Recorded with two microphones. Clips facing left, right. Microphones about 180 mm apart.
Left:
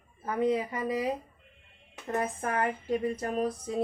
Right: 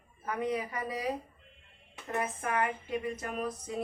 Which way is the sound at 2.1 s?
35° left (ahead or behind).